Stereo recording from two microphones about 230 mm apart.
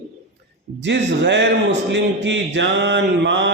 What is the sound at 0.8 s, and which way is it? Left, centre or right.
Speech, right.